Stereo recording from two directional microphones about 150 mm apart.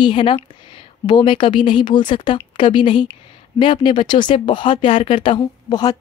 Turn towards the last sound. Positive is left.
turn(degrees=25)  # may be behind; listen again after turning